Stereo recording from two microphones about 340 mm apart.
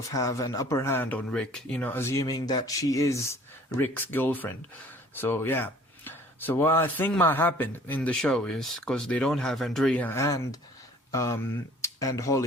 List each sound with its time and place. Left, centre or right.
0.1 s speech: centre